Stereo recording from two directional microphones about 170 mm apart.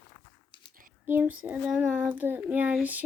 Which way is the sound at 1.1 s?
10° right (ahead or behind).